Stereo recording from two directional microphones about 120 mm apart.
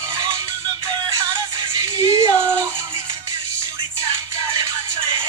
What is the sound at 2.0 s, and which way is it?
Music, 30° right (ahead or behind).